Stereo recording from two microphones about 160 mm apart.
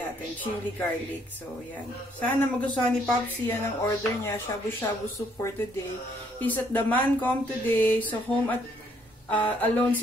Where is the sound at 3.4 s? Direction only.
10° left (ahead or behind).